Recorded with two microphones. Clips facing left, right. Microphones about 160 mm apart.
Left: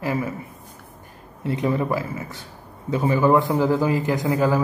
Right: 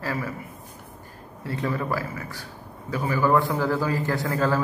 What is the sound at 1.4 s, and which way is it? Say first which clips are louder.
A man's voice: left 5 dB; 20° left (ahead or behind).